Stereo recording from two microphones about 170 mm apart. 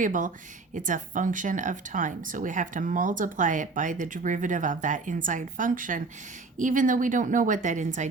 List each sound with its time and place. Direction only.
0.0 s speech: 50° right (ahead or behind)